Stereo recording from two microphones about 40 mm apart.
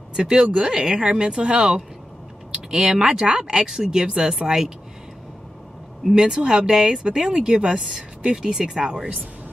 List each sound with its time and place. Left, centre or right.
0.1 s speech: centre
6.1 s speech: centre